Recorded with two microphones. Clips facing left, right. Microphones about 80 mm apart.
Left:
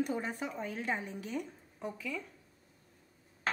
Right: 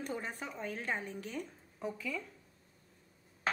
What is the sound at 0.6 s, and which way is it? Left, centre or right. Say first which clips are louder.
Speech: left 2 dB; right.